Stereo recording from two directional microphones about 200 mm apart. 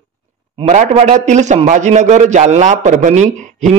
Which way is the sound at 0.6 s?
35° right (ahead or behind).